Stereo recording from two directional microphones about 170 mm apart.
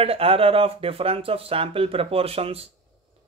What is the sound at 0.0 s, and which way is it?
Speech, 35° right (ahead or behind).